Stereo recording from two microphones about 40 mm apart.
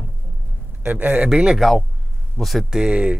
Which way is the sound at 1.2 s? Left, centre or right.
Centre.